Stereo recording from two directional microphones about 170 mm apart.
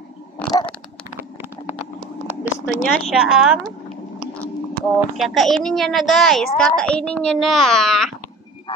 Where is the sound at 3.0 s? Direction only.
5° right (ahead or behind).